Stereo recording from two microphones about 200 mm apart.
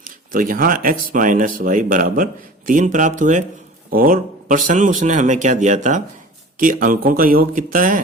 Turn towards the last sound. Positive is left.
turn(degrees=-45)  # may be behind; listen again after turning